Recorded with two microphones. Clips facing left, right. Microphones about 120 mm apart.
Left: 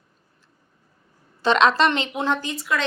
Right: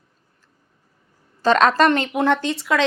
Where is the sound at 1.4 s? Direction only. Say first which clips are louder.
Right 2 dB; 45° right (ahead or behind); by 2.8 s 90° right.